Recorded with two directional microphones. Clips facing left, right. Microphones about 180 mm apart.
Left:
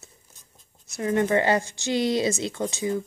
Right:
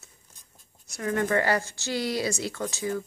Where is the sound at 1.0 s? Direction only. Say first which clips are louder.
Left 3 dB; 20° left (ahead or behind).